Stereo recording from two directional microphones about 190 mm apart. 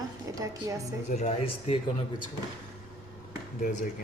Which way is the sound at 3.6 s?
40° left (ahead or behind).